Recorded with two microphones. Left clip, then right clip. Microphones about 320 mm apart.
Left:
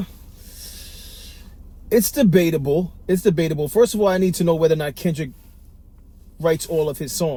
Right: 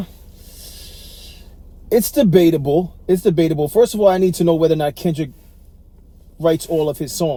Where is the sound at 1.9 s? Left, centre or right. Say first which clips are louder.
Right 3 dB; right.